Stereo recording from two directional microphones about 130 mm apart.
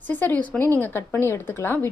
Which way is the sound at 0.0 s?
15° left (ahead or behind).